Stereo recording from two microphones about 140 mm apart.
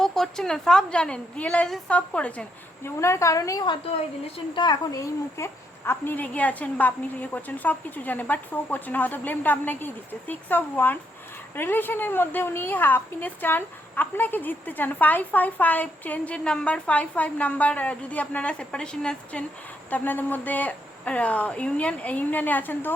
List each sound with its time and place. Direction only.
0.0 s a woman's voice: 5° left (ahead or behind)
3.0 s a woman's voice: 20° left (ahead or behind)